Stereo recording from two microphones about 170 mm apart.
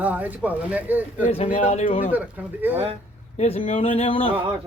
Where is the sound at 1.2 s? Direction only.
45° left (ahead or behind).